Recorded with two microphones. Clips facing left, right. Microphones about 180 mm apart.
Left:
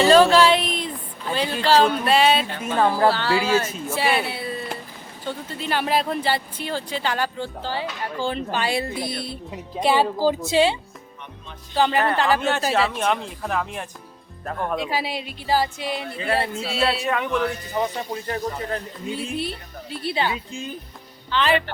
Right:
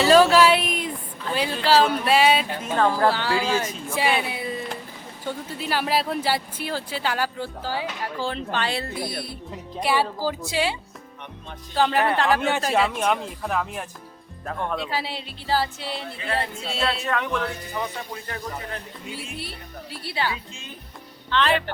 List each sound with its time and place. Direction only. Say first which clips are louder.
0.0 s a sound: left 1 dB; 10° right (ahead or behind)
1.6 s speech: left 1 dB; 5° right (ahead or behind)
2.7 s speech: left 1 dB; 10° left (ahead or behind)
3.1 s speech: left 2 dB; 15° right (ahead or behind)
3.3 s speech: left 3 dB; 5° left (ahead or behind)
4.2 s speech: left 1 dB; 15° right (ahead or behind); by 9.0 s 10° left (ahead or behind)
9.0 s speech: left 2 dB; 25° left (ahead or behind)
11.7 s speech: left 1 dB; centre (ahead or behind)
18.1 s speech: left 6 dB; 30° left (ahead or behind)
21.2 s speech: left 1 dB; centre (ahead or behind)